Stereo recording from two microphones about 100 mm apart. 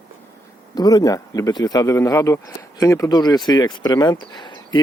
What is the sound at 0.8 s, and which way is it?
Speech, 40° left (ahead or behind).